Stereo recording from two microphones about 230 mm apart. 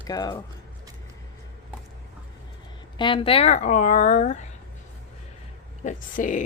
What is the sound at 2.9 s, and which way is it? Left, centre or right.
Speech, left.